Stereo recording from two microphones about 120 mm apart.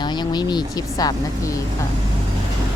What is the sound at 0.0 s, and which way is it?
Speech, 40° left (ahead or behind).